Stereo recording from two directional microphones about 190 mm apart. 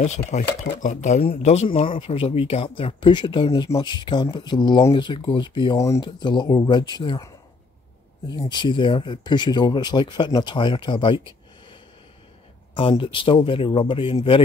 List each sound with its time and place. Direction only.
0.0 s speech: 40° left (ahead or behind); by 7.2 s 25° left (ahead or behind)
8.3 s speech: 25° left (ahead or behind)